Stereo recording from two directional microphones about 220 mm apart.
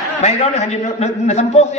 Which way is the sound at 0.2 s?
30° left (ahead or behind).